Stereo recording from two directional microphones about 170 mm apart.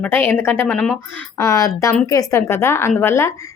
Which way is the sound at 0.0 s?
15° left (ahead or behind).